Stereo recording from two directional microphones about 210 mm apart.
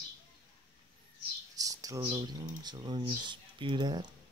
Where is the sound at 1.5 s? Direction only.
15° right (ahead or behind).